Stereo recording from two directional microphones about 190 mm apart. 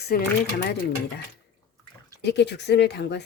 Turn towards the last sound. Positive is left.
turn(degrees=60)  # may be behind; listen again after turning